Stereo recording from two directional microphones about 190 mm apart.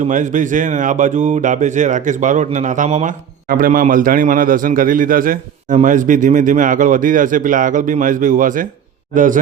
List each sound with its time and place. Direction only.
0.0 s speech: 40° right (ahead or behind)